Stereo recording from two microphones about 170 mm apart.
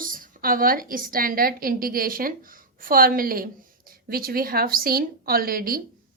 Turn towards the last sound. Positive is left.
turn(degrees=-60)  # may be behind; listen again after turning